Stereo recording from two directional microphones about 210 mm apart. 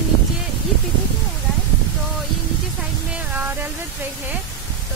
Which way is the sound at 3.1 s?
10° right (ahead or behind).